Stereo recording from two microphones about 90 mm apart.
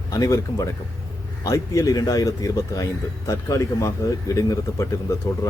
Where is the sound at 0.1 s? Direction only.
40° left (ahead or behind).